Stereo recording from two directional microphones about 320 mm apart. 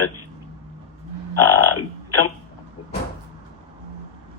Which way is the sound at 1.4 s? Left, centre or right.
Left.